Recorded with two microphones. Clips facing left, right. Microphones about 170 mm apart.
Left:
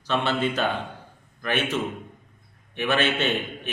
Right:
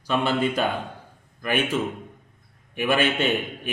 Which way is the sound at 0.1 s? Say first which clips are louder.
Right 2 dB; 10° right (ahead or behind).